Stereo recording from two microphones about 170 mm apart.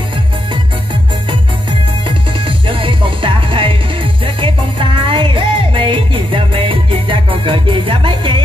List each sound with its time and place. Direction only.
2.0 s music: 30° right (ahead or behind)